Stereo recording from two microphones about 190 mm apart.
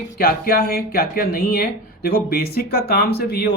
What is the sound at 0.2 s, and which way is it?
Speech, 50° left (ahead or behind).